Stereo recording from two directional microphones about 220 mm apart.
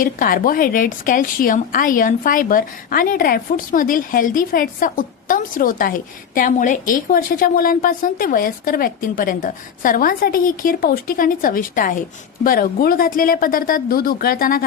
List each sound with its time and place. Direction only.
0.0 s a woman's voice: 40° left (ahead or behind)